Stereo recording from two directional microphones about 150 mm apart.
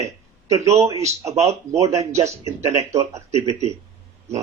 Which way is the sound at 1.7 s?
20° right (ahead or behind).